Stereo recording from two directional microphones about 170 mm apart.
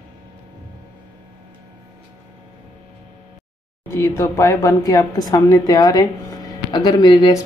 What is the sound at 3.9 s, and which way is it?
Speech, 15° left (ahead or behind).